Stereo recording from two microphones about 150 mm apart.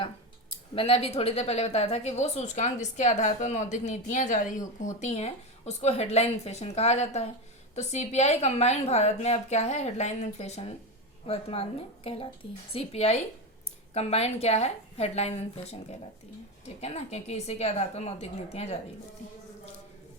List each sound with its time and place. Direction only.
0.8 s a woman's voice: 40° left (ahead or behind)